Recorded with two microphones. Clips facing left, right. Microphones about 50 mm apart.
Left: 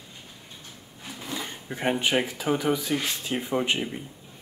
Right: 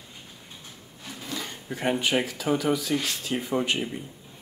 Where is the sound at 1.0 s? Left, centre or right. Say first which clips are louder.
Even; centre.